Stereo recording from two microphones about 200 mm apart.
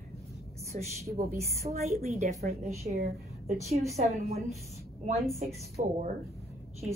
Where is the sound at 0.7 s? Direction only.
40° right (ahead or behind).